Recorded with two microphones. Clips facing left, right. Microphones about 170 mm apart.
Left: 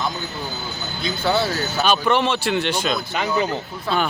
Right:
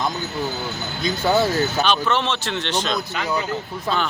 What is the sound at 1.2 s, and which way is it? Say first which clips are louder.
Speech: right 2 dB; 15° right (ahead or behind).